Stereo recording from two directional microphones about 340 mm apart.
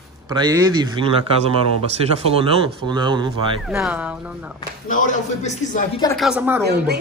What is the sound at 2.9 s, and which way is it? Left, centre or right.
A woman's voice, centre.